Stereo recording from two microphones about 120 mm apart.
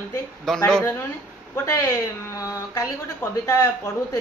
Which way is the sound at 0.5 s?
5° left (ahead or behind).